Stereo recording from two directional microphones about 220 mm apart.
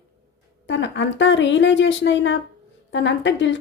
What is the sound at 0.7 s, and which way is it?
A woman's voice, 55° left (ahead or behind).